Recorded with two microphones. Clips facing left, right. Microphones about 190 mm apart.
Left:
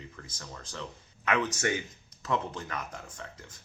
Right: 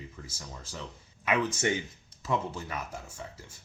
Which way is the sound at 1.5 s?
25° right (ahead or behind).